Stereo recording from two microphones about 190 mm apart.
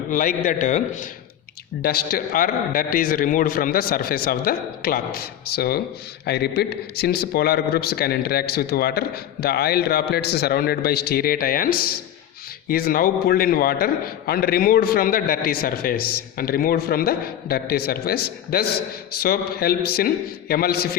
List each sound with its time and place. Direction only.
0.1 s a man's voice: 45° left (ahead or behind)
1.8 s a man's voice: 55° left (ahead or behind)